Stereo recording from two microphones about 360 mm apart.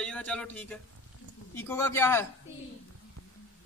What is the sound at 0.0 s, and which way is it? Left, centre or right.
A man's voice, centre.